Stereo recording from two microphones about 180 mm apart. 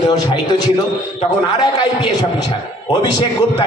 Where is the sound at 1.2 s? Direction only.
25° left (ahead or behind).